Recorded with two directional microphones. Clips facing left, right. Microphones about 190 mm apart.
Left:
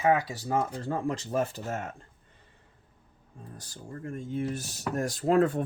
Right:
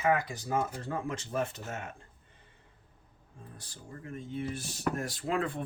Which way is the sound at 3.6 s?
45° left (ahead or behind).